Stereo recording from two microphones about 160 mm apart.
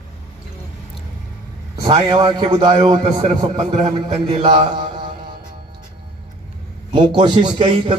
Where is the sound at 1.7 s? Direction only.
25° right (ahead or behind); by 3.9 s 50° right (ahead or behind).